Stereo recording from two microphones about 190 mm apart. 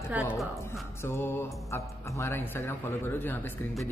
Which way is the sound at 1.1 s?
10° left (ahead or behind).